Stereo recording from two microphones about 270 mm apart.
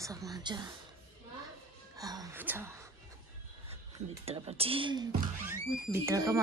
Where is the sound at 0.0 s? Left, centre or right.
Centre.